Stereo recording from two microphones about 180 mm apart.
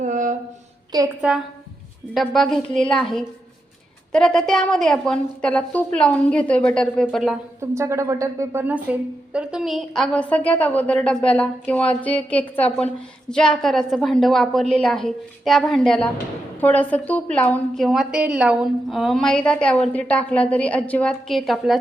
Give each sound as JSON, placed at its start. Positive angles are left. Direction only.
{"t": 0.0, "sound": "a sound", "side_deg": -45}
{"t": 0.9, "sound": "a woman's voice", "side_deg": -20}
{"t": 2.1, "sound": "a woman's voice", "side_deg": 0}
{"t": 7.6, "sound": "a woman's voice", "side_deg": -15}